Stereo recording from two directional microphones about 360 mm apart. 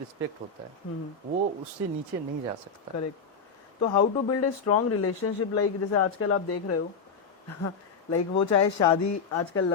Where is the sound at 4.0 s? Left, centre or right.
Left.